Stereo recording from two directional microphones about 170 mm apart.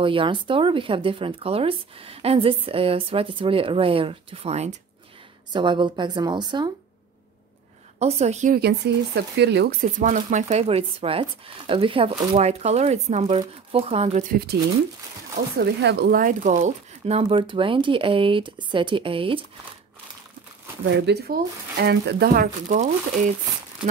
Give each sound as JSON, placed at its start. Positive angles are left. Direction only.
{"t": 0.0, "sound": "speech", "side_deg": -30}
{"t": 5.5, "sound": "a woman's voice", "side_deg": -30}
{"t": 8.0, "sound": "speech", "side_deg": -40}
{"t": 8.5, "sound": "speech", "side_deg": -75}
{"t": 15.5, "sound": "speech", "side_deg": -80}
{"t": 20.8, "sound": "speech", "side_deg": -85}